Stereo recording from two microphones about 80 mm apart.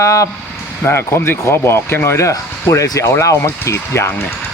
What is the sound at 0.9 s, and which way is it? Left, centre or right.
Speech, left.